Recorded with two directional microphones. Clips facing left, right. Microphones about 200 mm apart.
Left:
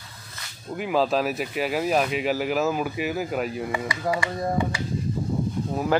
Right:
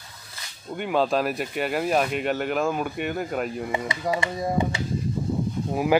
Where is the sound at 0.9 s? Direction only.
Centre (ahead or behind).